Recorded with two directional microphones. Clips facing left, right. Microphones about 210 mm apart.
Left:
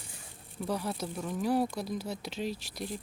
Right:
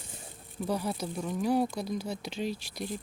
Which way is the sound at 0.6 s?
Centre (ahead or behind).